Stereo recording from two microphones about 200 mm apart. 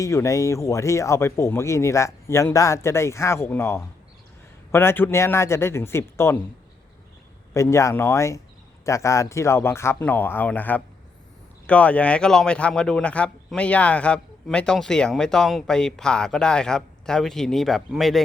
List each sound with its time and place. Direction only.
0.0 s speech: 15° left (ahead or behind)
7.5 s speech: 15° left (ahead or behind)